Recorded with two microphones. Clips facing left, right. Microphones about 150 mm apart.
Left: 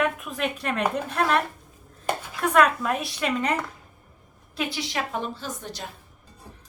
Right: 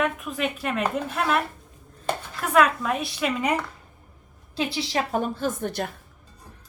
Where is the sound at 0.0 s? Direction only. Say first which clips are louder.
Even; centre (ahead or behind).